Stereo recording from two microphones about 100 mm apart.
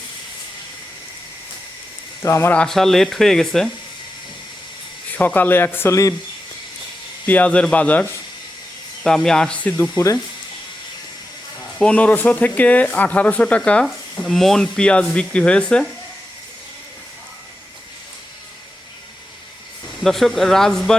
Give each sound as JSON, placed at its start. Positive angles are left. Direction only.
{"t": 2.2, "sound": "speech", "side_deg": 30}
{"t": 2.5, "sound": "speech", "side_deg": 10}
{"t": 5.1, "sound": "speech", "side_deg": 20}
{"t": 7.3, "sound": "speech", "side_deg": 15}
{"t": 9.0, "sound": "speech", "side_deg": 5}
{"t": 11.8, "sound": "speech", "side_deg": 15}
{"t": 20.0, "sound": "speech", "side_deg": 0}